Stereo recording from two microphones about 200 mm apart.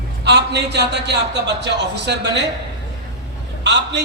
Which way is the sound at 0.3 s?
60° right (ahead or behind).